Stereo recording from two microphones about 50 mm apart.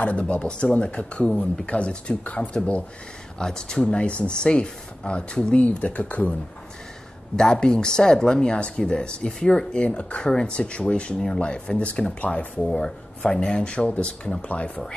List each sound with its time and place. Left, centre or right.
0.0 s speech: left
7.3 s speech: centre